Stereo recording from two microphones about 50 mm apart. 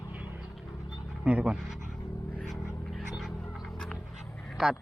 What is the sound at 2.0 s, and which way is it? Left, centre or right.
Vehicle, left.